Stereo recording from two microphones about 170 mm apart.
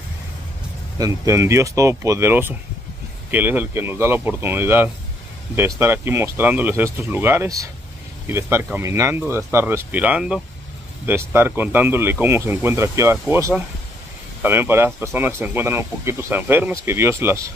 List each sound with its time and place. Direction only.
0.9 s speech: 20° right (ahead or behind)